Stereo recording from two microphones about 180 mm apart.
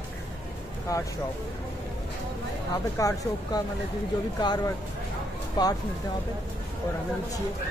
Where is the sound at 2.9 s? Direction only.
20° left (ahead or behind).